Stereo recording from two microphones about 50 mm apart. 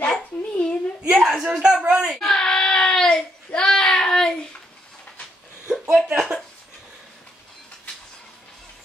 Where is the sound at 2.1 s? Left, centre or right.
Centre.